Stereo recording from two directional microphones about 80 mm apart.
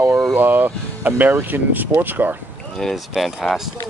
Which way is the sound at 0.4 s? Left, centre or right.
Right.